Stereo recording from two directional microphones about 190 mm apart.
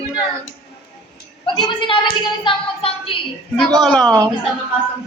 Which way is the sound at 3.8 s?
5° left (ahead or behind).